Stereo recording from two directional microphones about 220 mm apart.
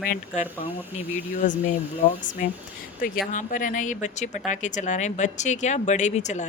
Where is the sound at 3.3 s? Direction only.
35° left (ahead or behind).